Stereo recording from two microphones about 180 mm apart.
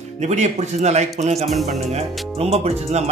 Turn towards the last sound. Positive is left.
turn(degrees=-35)  # may be behind; listen again after turning